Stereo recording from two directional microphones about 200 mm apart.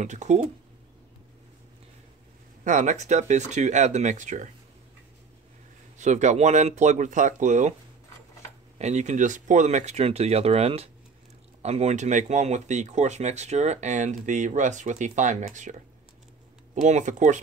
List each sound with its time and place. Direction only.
0.0 s speech: 35° right (ahead or behind)
2.6 s speech: 40° right (ahead or behind)
5.9 s speech: 35° right (ahead or behind)
8.7 s speech: 35° right (ahead or behind)
16.8 s speech: 35° right (ahead or behind)